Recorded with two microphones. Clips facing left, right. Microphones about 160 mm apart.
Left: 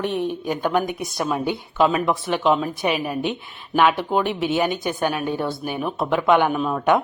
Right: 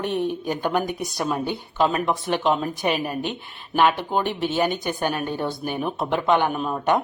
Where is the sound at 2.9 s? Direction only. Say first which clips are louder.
Left 2 dB; 45° right (ahead or behind).